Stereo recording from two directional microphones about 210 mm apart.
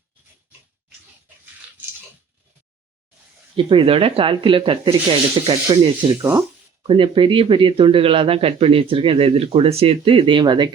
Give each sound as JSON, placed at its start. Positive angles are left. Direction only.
{"t": 3.5, "sound": "speech", "side_deg": -25}